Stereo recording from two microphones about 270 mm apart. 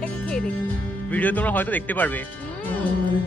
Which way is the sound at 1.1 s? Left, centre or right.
Centre.